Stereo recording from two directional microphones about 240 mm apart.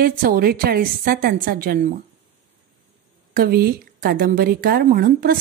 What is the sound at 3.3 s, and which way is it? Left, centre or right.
Speech, right.